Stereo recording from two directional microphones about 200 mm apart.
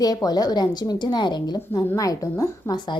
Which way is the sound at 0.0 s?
20° left (ahead or behind).